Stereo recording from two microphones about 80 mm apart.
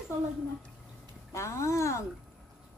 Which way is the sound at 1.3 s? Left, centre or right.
Left.